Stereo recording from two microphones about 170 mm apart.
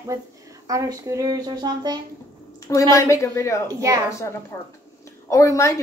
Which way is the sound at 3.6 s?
20° right (ahead or behind).